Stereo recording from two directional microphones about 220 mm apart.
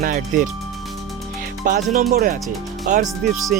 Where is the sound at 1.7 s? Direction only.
40° right (ahead or behind).